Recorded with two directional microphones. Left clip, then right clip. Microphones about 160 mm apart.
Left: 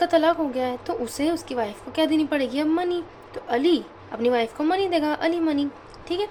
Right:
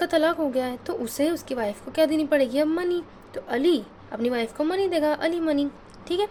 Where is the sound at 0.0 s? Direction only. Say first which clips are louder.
Left 2 dB; 35° right (ahead or behind).